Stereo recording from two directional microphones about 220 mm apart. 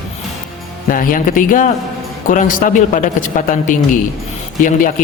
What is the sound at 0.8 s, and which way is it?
A man's voice, 40° left (ahead or behind).